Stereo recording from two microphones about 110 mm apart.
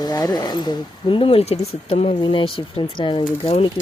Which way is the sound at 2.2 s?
50° left (ahead or behind).